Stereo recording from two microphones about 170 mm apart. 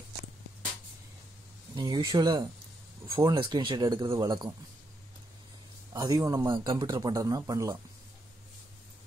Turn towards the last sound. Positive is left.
turn(degrees=-20)  # may be behind; listen again after turning